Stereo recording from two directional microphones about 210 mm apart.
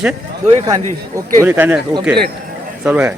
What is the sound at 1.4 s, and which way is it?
Speech, 10° right (ahead or behind).